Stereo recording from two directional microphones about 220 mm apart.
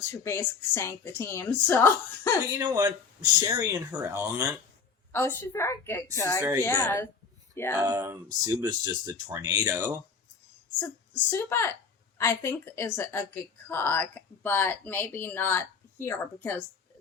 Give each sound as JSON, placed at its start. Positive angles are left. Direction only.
{"t": 0.0, "sound": "a woman's voice", "side_deg": 10}
{"t": 2.5, "sound": "speech", "side_deg": -15}
{"t": 5.1, "sound": "a woman's voice", "side_deg": 10}
{"t": 7.8, "sound": "speech", "side_deg": -10}
{"t": 11.3, "sound": "a woman's voice", "side_deg": 10}